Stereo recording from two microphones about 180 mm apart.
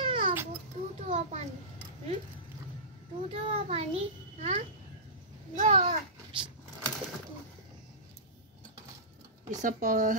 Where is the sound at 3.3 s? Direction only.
35° right (ahead or behind).